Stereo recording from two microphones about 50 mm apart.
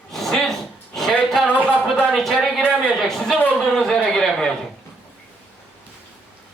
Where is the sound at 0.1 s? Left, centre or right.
Centre.